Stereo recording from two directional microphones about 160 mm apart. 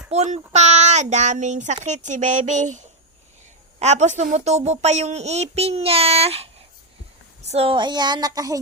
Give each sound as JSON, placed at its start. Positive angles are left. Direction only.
{"t": 0.1, "sound": "a child's voice", "side_deg": -45}